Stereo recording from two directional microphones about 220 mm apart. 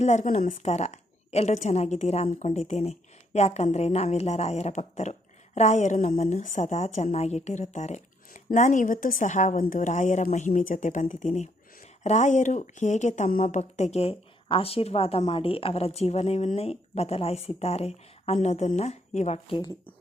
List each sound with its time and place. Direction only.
0.0 s a woman's voice: 30° left (ahead or behind)